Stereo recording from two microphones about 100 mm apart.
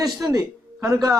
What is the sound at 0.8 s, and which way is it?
Speech, 30° right (ahead or behind).